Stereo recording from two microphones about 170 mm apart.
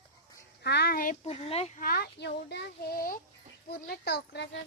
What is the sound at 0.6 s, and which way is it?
Speech, 70° left (ahead or behind).